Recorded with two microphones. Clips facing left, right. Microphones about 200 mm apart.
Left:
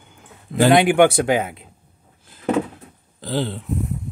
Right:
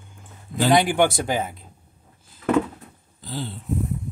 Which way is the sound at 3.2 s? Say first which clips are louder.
Left 8 dB; 80° left.